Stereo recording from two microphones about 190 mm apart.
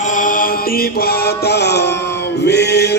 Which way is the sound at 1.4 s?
60° left (ahead or behind).